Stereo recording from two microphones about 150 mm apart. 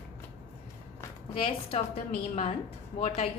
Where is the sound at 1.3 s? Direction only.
40° left (ahead or behind).